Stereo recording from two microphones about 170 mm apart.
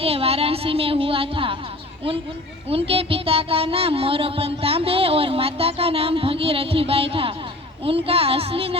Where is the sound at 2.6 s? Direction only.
35° right (ahead or behind).